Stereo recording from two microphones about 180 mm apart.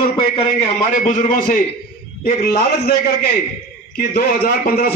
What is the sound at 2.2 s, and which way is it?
A man's voice, 55° left (ahead or behind).